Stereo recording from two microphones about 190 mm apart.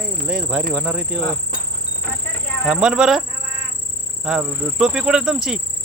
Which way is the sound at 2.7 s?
5° right (ahead or behind).